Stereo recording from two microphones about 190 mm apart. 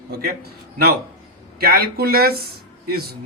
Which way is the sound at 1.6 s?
55° right (ahead or behind).